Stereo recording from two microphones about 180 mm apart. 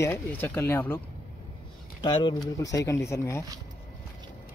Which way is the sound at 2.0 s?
25° left (ahead or behind).